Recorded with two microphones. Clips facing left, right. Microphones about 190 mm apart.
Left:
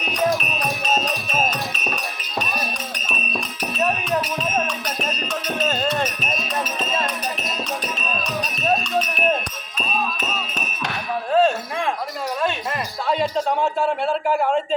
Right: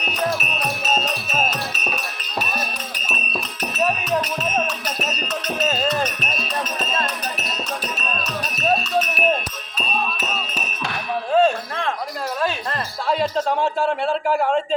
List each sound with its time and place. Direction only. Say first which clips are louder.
0.0 s music: left 3 dB; 10° left (ahead or behind)
0.3 s music: left 1 dB; 5° right (ahead or behind)
3.8 s music: right 1 dB; centre (ahead or behind)
8.1 s music: left 1 dB; centre (ahead or behind)
11.3 s a sound: right 1 dB; centre (ahead or behind)
13.3 s a man's voice: even; centre (ahead or behind)